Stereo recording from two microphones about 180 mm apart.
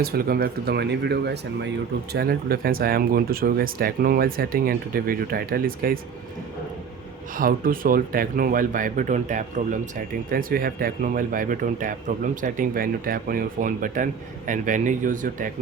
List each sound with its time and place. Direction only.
0.0 s speech: 55° right (ahead or behind)
2.1 s speech: 55° right (ahead or behind)
7.3 s speech: 50° right (ahead or behind)